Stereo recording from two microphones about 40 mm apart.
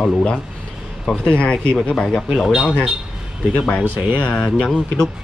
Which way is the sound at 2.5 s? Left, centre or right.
Centre.